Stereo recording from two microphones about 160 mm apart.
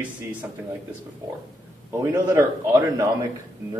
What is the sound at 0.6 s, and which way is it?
Speech, 10° right (ahead or behind).